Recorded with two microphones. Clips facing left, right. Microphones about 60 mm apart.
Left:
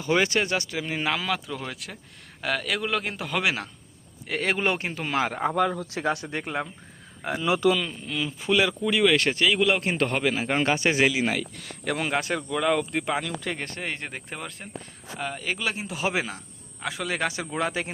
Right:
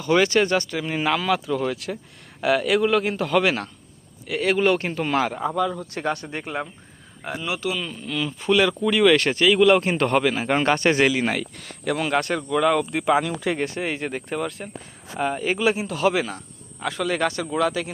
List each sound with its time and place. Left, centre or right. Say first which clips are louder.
0.0 s speech: right 5 dB; centre
4.3 s speech: right 5 dB; left
4.8 s speech: right 4 dB; centre
5.3 s speech: even; left
5.5 s speech: even; left
6.1 s speech: right 1 dB; centre
8.0 s speech: right 4 dB; centre
11.9 s speech: right 4 dB; centre
13.2 s speech: right 7 dB; centre
15.2 s speech: right 8 dB; right
16.0 s speech: right 6 dB; centre
16.8 s speech: right 5 dB; centre; by 17.9 s left